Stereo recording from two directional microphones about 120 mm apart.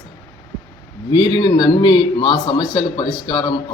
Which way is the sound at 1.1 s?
40° left (ahead or behind).